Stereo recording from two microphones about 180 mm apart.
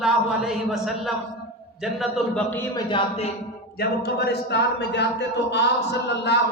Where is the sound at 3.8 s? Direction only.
65° left (ahead or behind).